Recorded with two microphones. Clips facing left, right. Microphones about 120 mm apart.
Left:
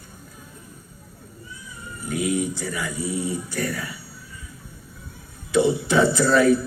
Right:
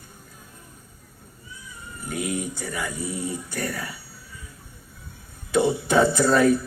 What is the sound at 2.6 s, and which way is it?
Speech, 50° right (ahead or behind).